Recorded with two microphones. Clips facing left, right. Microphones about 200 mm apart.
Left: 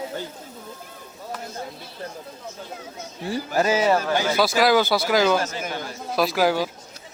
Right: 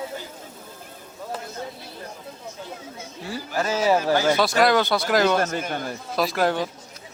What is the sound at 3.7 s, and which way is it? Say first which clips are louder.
Speech: right 2 dB; 5° right (ahead or behind).